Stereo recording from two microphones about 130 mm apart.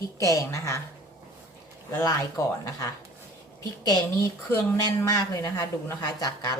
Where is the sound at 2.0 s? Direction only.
25° left (ahead or behind).